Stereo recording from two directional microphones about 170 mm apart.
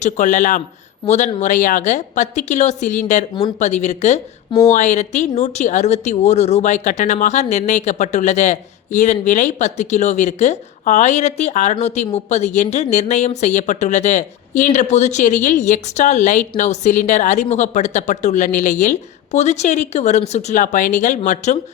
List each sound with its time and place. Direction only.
0.0 s speech: 45° left (ahead or behind)